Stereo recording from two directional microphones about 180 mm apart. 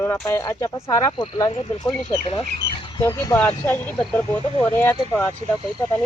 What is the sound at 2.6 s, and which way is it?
Bird, 30° left (ahead or behind).